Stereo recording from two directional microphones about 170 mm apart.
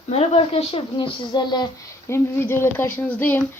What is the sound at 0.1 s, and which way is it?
Speech, 35° left (ahead or behind).